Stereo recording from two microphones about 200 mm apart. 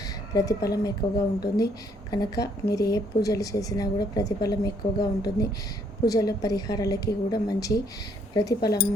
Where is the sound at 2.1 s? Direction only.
20° left (ahead or behind).